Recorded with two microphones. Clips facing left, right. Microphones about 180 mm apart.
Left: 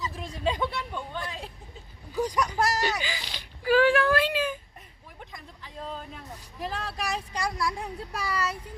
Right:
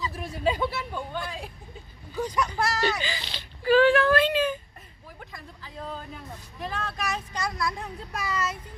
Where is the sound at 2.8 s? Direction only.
15° left (ahead or behind).